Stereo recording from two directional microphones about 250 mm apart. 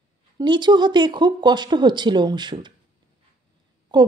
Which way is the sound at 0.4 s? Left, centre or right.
Centre.